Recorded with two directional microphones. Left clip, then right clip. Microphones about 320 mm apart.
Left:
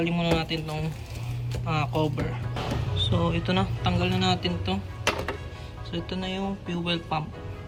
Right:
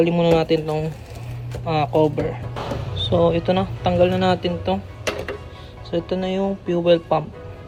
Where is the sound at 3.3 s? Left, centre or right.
Centre.